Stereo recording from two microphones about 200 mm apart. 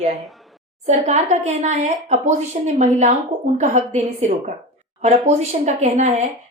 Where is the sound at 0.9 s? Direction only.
35° right (ahead or behind).